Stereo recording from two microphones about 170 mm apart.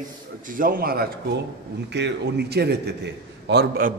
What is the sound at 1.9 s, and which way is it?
A man's voice, 90° right.